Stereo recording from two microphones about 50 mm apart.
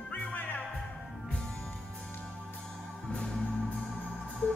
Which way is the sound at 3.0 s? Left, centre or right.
Centre.